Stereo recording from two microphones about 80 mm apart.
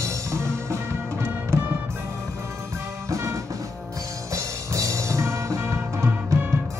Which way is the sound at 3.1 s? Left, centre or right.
Right.